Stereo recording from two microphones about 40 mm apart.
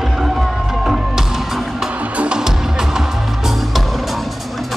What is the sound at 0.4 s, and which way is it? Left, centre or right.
Music, centre.